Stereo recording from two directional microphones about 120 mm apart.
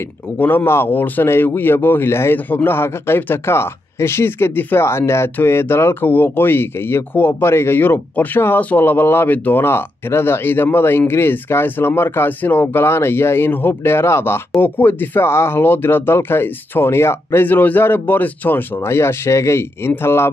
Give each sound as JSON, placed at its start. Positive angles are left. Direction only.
{"t": 0.4, "sound": "speech", "side_deg": 15}